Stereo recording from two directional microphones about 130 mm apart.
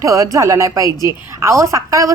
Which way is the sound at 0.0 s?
25° right (ahead or behind).